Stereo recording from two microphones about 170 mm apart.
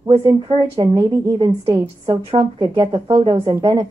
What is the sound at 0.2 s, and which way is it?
A woman's voice, 25° right (ahead or behind).